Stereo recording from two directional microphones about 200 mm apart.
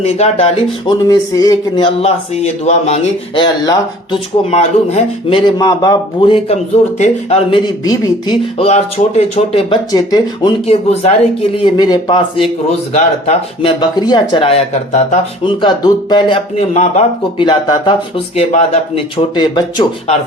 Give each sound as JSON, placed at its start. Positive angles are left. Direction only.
{"t": 0.0, "sound": "speech", "side_deg": 30}
{"t": 1.0, "sound": "speech", "side_deg": 15}
{"t": 4.5, "sound": "speech", "side_deg": 30}
{"t": 10.7, "sound": "speech", "side_deg": 30}